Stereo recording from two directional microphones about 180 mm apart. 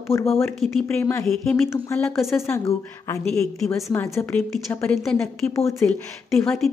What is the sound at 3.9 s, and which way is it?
A woman's voice, 10° left (ahead or behind).